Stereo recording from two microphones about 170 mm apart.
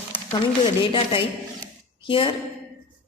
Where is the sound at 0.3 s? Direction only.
30° left (ahead or behind).